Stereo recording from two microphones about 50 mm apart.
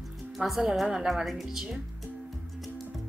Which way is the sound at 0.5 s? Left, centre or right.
Centre.